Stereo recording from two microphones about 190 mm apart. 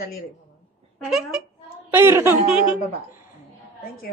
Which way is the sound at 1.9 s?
10° right (ahead or behind).